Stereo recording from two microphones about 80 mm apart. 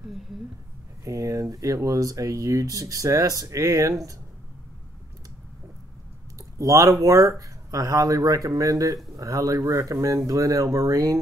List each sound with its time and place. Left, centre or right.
1.0 s speech: right
6.3 s speech: right